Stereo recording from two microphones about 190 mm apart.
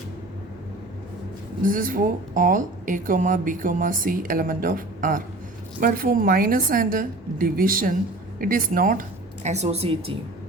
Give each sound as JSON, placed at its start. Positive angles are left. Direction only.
{"t": 1.6, "sound": "speech", "side_deg": -45}